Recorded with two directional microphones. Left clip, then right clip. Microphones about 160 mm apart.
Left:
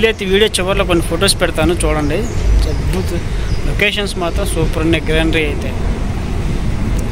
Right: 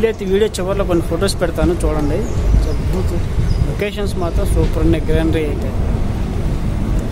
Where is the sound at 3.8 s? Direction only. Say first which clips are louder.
Left 6 dB; 5° right (ahead or behind).